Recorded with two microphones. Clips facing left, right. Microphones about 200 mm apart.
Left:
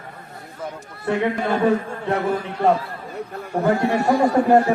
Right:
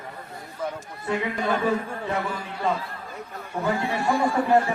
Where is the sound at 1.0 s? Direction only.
60° left (ahead or behind).